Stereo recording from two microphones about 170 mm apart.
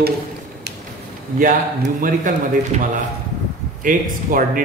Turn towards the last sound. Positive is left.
turn(degrees=-50)  # may be behind; listen again after turning